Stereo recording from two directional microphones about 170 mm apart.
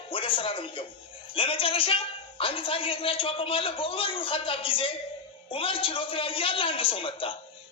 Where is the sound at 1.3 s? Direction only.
30° left (ahead or behind).